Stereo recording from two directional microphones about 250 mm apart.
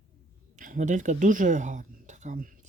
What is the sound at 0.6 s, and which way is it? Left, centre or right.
Speech, right.